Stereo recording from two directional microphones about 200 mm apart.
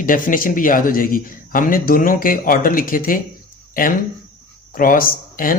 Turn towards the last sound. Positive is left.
turn(degrees=45)  # may be behind; listen again after turning